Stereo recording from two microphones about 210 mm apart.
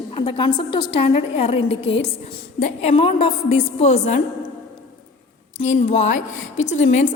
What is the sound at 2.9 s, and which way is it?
A woman's voice, 25° left (ahead or behind).